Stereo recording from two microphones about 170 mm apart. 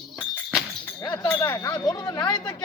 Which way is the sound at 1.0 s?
25° left (ahead or behind).